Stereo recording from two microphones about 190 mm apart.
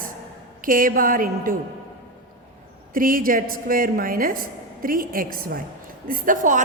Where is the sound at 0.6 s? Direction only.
45° right (ahead or behind).